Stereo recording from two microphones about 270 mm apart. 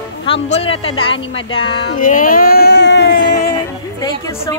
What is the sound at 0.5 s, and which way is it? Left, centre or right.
Speech, left.